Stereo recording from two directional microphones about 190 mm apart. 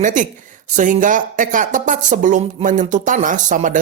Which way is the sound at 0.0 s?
40° right (ahead or behind).